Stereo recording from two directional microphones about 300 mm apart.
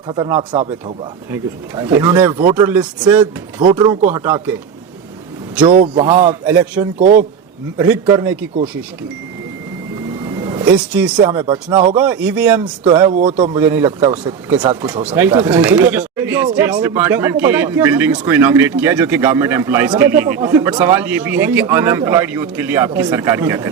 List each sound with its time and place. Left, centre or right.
0.1 s speech: centre
5.6 s speech: centre
10.4 s a sound: centre
10.9 s speech: centre